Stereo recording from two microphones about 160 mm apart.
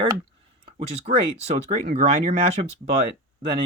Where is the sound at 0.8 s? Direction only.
40° right (ahead or behind).